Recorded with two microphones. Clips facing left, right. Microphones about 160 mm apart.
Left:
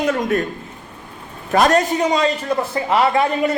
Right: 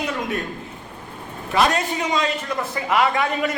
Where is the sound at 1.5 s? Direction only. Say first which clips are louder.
Left 5 dB; 45° left (ahead or behind).